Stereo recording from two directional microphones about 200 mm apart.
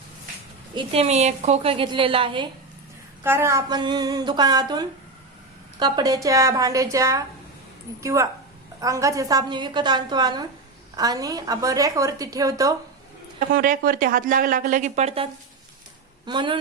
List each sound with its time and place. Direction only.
0.8 s a woman's voice: 30° right (ahead or behind)
3.2 s a woman's voice: 15° right (ahead or behind)
13.5 s a woman's voice: 45° right (ahead or behind); by 16.6 s 25° right (ahead or behind)